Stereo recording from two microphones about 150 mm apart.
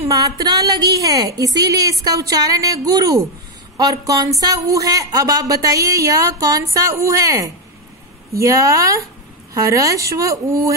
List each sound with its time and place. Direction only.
0.1 s speech: 25° right (ahead or behind)